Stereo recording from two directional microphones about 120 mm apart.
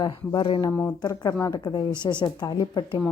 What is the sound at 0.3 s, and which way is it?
Speech, 45° left (ahead or behind).